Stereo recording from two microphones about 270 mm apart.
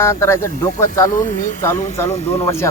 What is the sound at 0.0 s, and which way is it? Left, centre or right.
Speech, centre.